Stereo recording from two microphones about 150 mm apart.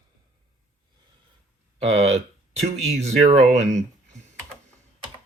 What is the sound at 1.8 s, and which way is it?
Speech, 40° right (ahead or behind).